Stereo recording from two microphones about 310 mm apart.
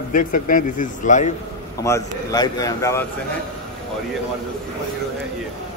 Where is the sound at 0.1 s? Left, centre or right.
Left.